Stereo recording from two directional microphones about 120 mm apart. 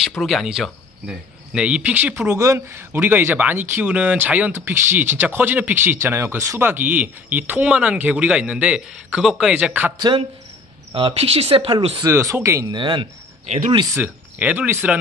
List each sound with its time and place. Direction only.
0.2 s speech: centre (ahead or behind)
9.9 s speech: 40° right (ahead or behind)
11.0 s speech: 55° right (ahead or behind)
12.0 s speech: 25° right (ahead or behind)
12.7 s speech: 40° right (ahead or behind)
13.9 s speech: 15° right (ahead or behind)